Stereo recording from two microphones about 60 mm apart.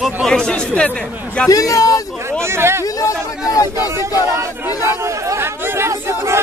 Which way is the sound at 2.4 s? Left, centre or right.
Right.